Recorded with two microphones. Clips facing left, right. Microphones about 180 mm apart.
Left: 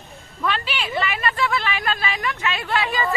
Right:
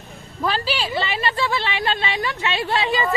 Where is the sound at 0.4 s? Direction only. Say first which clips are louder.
Right 3 dB; 35° right (ahead or behind).